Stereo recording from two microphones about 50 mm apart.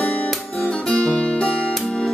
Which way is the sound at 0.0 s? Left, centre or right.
Left.